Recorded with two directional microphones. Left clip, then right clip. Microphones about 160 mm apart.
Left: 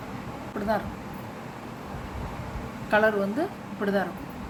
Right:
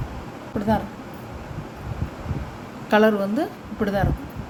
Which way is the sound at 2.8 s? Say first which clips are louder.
Right 4 dB; 50° right (ahead or behind).